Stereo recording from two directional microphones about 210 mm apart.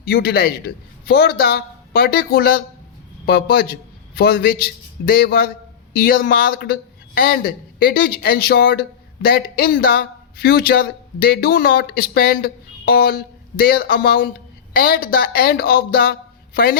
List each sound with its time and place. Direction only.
0.0 s a man's voice: 45° left (ahead or behind)